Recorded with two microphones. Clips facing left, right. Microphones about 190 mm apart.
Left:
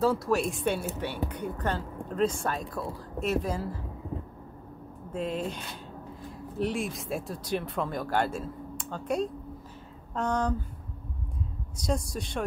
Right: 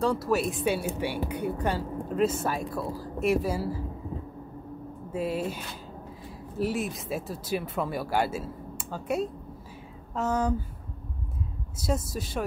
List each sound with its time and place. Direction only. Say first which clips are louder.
0.0 s a woman's voice: even; centre (ahead or behind)
5.1 s a woman's voice: right 2 dB; 5° right (ahead or behind)
6.6 s speech: right 1 dB; 5° right (ahead or behind)
11.7 s speech: right 1 dB; 5° right (ahead or behind)